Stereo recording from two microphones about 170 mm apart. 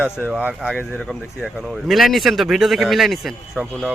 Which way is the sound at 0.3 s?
5° right (ahead or behind).